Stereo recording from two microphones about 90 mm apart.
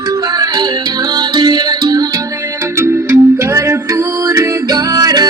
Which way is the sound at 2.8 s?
30° right (ahead or behind).